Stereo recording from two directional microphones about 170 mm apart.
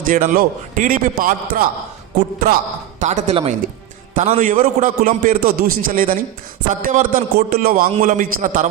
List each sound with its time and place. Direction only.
0.0 s a man's voice: 55° right (ahead or behind)
3.0 s a man's voice: 45° right (ahead or behind)